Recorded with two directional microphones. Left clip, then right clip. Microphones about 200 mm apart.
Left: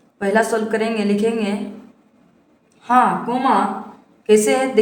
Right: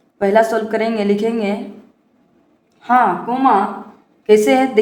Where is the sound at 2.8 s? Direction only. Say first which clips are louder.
Right 1 dB; 25° right (ahead or behind).